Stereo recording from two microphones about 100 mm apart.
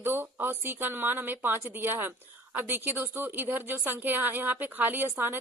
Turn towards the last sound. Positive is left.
turn(degrees=-20)  # may be behind; listen again after turning